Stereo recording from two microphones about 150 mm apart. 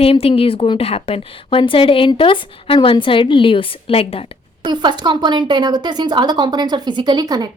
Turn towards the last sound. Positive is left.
turn(degrees=-25)  # may be behind; listen again after turning